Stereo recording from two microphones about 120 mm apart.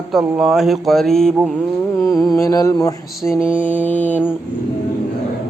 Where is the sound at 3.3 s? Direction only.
20° left (ahead or behind).